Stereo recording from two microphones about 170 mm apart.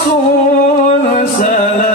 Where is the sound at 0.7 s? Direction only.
45° left (ahead or behind).